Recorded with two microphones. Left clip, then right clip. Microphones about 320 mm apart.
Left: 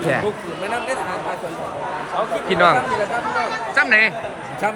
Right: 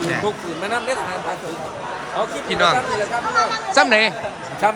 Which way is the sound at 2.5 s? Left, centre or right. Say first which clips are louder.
Left 2 dB; centre.